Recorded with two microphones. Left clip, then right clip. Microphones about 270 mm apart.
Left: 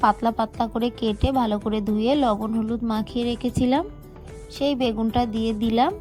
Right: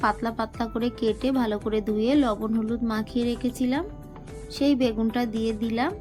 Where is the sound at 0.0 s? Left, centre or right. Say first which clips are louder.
Left 5 dB; left.